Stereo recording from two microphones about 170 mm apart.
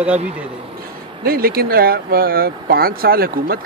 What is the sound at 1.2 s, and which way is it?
Speech, 60° right (ahead or behind).